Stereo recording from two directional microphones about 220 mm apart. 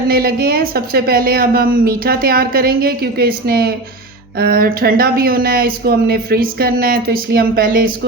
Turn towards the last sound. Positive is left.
turn(degrees=-40)  # may be behind; listen again after turning